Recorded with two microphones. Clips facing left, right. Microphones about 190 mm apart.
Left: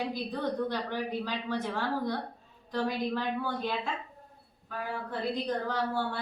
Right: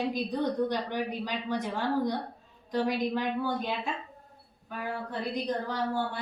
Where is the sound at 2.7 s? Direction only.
15° right (ahead or behind).